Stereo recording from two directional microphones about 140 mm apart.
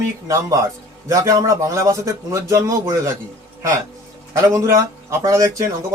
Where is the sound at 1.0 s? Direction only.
25° right (ahead or behind).